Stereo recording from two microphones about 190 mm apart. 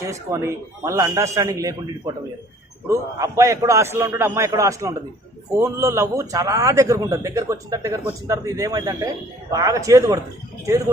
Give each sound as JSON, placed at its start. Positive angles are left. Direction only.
{"t": 0.0, "sound": "a man's voice", "side_deg": -15}
{"t": 3.2, "sound": "a man's voice", "side_deg": -15}